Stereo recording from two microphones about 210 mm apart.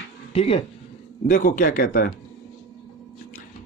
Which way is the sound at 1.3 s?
40° left (ahead or behind).